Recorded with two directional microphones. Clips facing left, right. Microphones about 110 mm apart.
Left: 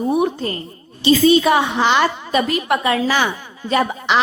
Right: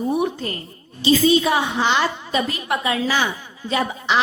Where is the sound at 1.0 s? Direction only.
65° left (ahead or behind).